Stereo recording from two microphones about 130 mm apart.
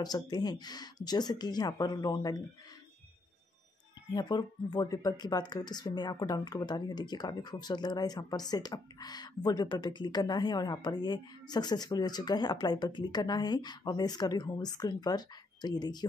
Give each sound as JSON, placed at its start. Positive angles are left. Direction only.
{"t": 0.0, "sound": "speech", "side_deg": 30}
{"t": 4.1, "sound": "speech", "side_deg": 30}